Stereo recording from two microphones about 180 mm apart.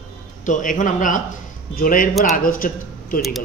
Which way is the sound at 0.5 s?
45° left (ahead or behind).